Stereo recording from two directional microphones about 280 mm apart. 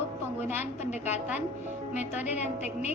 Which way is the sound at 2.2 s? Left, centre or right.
Left.